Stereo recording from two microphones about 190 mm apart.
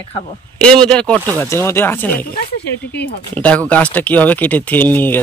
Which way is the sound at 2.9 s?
55° left (ahead or behind).